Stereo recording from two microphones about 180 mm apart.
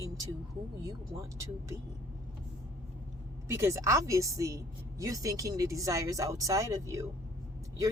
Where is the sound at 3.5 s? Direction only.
15° right (ahead or behind).